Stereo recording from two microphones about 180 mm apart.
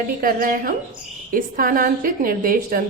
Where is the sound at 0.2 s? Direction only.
50° right (ahead or behind).